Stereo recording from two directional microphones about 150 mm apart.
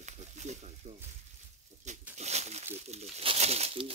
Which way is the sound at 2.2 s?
45° right (ahead or behind).